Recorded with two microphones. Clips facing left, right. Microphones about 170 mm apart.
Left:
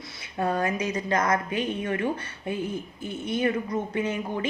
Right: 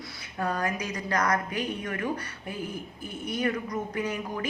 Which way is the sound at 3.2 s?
25° left (ahead or behind).